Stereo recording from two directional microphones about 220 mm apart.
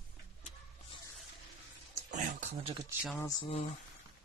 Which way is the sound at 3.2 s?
20° left (ahead or behind).